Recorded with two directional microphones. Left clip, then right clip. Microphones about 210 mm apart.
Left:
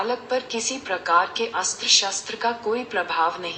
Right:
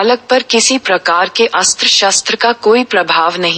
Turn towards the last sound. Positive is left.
turn(degrees=-45)  # may be behind; listen again after turning